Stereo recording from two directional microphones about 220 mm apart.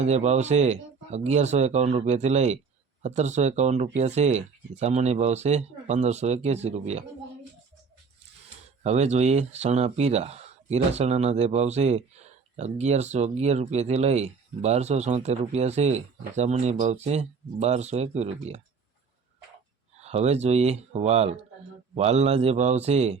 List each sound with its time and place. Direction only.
0.0 s speech: 30° right (ahead or behind)
8.8 s speech: 30° right (ahead or behind)
20.0 s speech: 30° right (ahead or behind)